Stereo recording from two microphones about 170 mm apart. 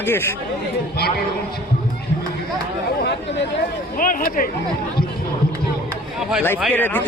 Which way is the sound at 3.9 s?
55° left (ahead or behind).